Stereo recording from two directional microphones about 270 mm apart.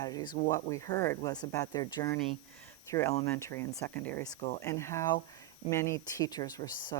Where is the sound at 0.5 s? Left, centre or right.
Centre.